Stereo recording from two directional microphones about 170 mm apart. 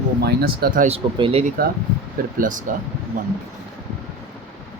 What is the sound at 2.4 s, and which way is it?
Speech, 50° right (ahead or behind).